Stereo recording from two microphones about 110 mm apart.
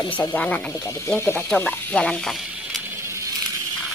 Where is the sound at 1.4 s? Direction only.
10° left (ahead or behind).